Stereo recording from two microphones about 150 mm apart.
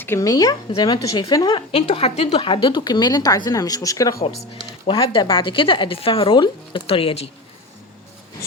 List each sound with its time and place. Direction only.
0.0 s a woman's voice: 20° left (ahead or behind)
4.9 s speech: 35° left (ahead or behind)